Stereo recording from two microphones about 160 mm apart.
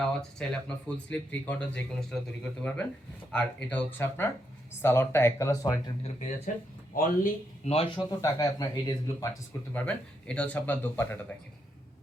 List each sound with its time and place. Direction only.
0.0 s speech: 5° left (ahead or behind); by 5.8 s 20° left (ahead or behind)
6.0 s speech: 40° left (ahead or behind)
7.6 s speech: 40° left (ahead or behind)
8.2 s speech: 20° left (ahead or behind)
9.7 s speech: 10° left (ahead or behind)